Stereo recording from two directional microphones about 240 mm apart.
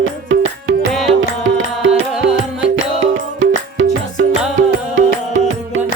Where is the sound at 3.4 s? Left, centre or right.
Right.